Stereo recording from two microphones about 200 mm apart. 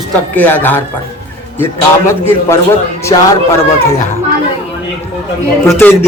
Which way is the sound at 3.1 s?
25° left (ahead or behind).